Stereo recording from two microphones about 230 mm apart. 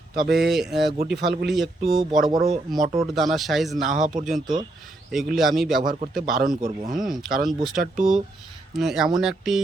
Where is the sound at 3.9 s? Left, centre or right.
Right.